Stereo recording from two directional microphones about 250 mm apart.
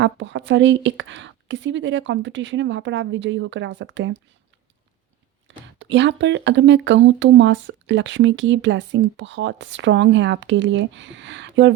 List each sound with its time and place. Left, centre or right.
0.0 s speech: right
5.5 s speech: right